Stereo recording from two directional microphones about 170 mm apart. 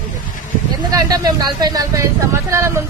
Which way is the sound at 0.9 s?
20° right (ahead or behind).